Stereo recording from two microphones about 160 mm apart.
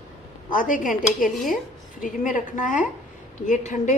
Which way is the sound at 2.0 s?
55° left (ahead or behind).